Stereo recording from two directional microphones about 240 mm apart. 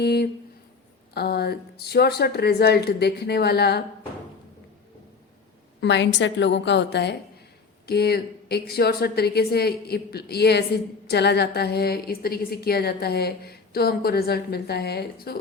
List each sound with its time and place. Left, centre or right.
0.0 s a sound: left
1.1 s speech: left
5.8 s a woman's voice: left